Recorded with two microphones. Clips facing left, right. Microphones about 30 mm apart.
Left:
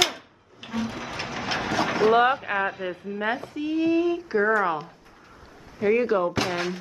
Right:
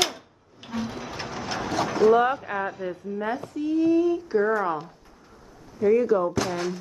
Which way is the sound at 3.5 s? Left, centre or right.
Left.